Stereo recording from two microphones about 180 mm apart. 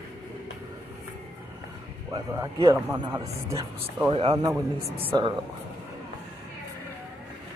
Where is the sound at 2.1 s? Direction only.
25° right (ahead or behind).